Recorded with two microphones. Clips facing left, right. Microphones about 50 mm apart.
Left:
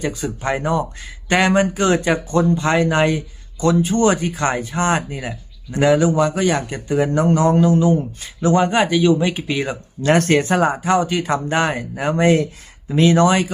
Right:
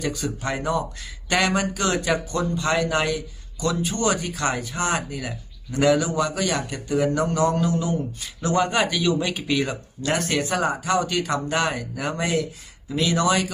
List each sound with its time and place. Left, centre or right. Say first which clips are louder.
0.0 s a man's voice: left 4 dB; left
10.0 s a man's voice: left 9 dB; left